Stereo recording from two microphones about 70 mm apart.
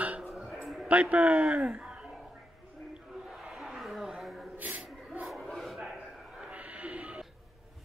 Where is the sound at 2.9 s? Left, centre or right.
Centre.